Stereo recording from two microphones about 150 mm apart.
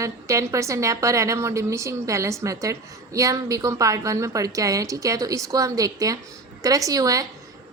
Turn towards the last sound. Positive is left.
turn(degrees=-25)  # may be behind; listen again after turning